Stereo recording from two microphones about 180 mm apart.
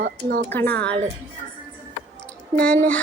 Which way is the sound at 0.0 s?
55° right (ahead or behind).